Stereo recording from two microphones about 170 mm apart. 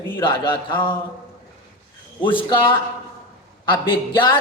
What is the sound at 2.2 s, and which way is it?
Speech, 30° left (ahead or behind).